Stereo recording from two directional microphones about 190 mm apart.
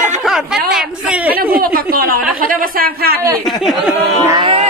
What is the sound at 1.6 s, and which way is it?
Speech, 50° right (ahead or behind).